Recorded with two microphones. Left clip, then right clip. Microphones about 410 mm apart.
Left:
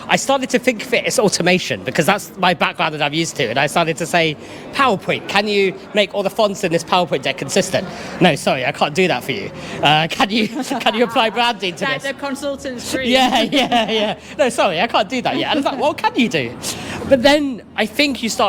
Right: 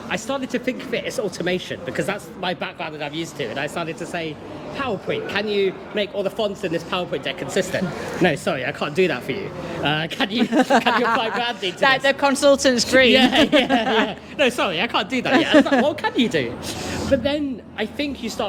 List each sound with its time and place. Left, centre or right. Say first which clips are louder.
0.1 s speech: left 9 dB; left
10.5 s speech: right 7 dB; right
11.3 s speech: left 6 dB; left
11.8 s speech: right 5 dB; right
13.1 s speech: left 1 dB; centre
17.1 s speech: left 9 dB; left